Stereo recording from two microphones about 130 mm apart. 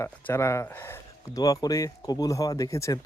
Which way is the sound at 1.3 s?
30° left (ahead or behind).